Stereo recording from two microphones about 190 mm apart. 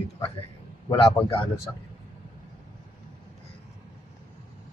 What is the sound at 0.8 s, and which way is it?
Speech, 30° left (ahead or behind).